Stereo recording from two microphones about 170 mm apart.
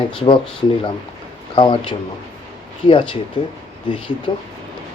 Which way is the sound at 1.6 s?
30° left (ahead or behind).